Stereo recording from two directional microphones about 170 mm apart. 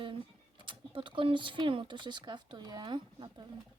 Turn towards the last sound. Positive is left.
turn(degrees=-25)  # may be behind; listen again after turning